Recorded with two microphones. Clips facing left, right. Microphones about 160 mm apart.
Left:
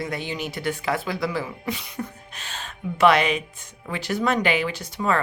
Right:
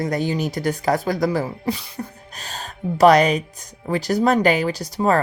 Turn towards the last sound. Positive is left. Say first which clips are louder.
# right 5 dB
turn(degrees=-40)  # may be behind; listen again after turning